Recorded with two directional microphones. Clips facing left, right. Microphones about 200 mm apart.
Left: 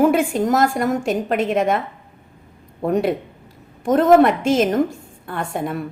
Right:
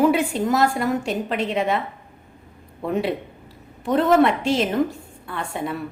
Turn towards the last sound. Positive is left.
turn(degrees=50)  # may be behind; listen again after turning